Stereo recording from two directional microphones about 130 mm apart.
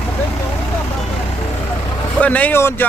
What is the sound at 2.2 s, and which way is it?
Speech, 10° left (ahead or behind).